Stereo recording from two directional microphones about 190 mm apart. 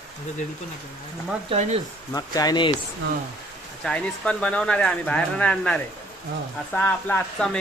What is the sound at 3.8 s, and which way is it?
Speech, 5° left (ahead or behind).